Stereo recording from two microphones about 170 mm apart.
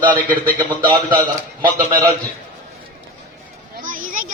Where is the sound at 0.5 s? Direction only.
25° right (ahead or behind).